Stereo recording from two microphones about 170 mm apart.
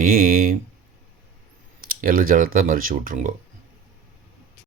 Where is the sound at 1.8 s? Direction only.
55° right (ahead or behind).